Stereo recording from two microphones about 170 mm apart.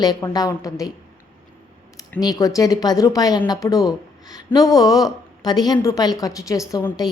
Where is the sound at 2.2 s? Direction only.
20° left (ahead or behind).